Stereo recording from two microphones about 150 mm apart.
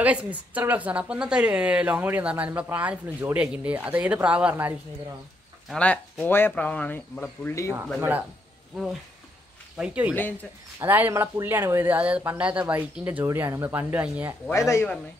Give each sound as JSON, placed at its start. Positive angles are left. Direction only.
{"t": 0.0, "sound": "a woman's voice", "side_deg": -10}
{"t": 5.7, "sound": "speech", "side_deg": 5}
{"t": 9.8, "sound": "a woman's voice", "side_deg": -10}
{"t": 14.5, "sound": "speech", "side_deg": 20}